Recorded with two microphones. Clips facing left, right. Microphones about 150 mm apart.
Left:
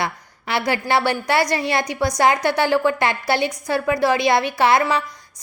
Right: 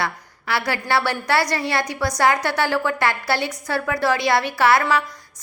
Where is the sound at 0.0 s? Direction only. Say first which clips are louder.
Left 1 dB; 20° left (ahead or behind).